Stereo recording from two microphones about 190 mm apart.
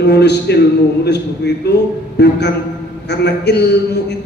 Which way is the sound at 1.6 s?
60° left (ahead or behind).